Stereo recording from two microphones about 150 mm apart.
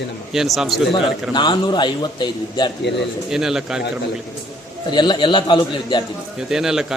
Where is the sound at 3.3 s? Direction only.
5° right (ahead or behind).